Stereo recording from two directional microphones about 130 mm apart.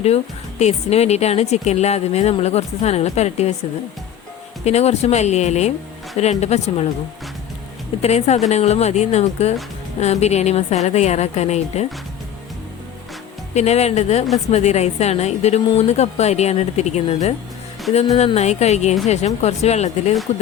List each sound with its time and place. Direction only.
0.6 s a woman's voice: 55° left (ahead or behind)
4.6 s a woman's voice: 55° left (ahead or behind)
8.0 s a woman's voice: 55° left (ahead or behind)
13.5 s a woman's voice: 60° left (ahead or behind)